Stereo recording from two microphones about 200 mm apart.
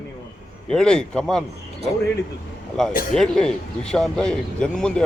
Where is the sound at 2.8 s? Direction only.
5° left (ahead or behind).